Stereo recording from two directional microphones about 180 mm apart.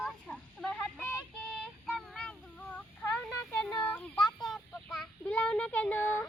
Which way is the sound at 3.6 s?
5° left (ahead or behind).